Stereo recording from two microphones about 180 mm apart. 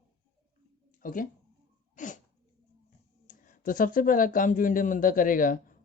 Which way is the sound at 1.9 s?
45° left (ahead or behind).